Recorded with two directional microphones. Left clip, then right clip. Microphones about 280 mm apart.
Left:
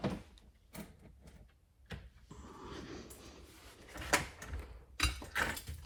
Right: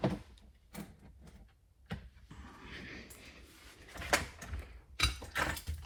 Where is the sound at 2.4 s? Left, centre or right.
Centre.